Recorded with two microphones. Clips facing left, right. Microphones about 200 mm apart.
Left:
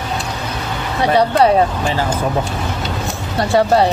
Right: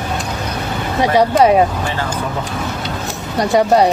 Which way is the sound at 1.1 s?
15° right (ahead or behind).